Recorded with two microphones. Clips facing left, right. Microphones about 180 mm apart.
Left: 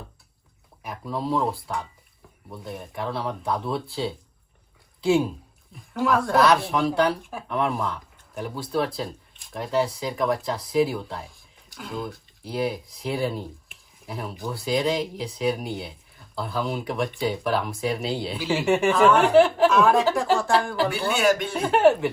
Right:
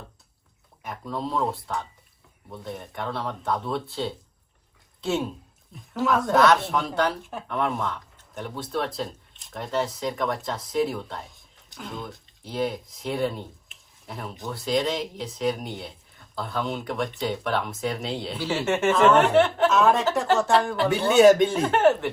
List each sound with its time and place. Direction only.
0.8 s speech: 5° left (ahead or behind)
18.4 s speech: 15° left (ahead or behind)
18.7 s speech: centre (ahead or behind)
21.0 s a man's voice: 20° right (ahead or behind)
21.6 s speech: centre (ahead or behind)